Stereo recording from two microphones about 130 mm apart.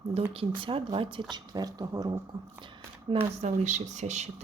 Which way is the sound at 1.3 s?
30° right (ahead or behind).